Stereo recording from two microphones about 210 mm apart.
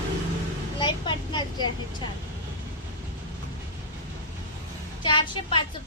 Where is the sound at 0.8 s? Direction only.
20° left (ahead or behind).